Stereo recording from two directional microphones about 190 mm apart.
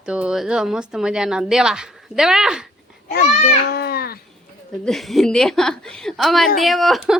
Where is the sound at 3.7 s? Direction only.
55° left (ahead or behind).